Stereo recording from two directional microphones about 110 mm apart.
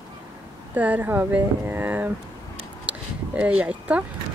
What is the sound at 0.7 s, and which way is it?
Speech, 15° right (ahead or behind).